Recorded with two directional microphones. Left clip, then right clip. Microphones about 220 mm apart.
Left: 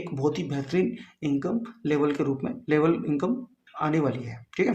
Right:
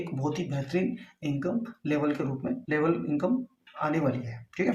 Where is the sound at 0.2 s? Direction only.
40° left (ahead or behind).